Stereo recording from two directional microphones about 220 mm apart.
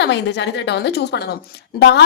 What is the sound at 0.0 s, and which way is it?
A woman's voice, 50° left (ahead or behind).